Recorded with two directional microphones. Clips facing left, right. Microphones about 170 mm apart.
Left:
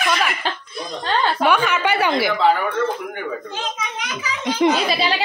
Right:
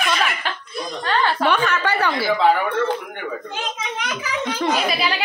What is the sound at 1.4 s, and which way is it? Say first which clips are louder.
Speech: left 2 dB; 10° left (ahead or behind).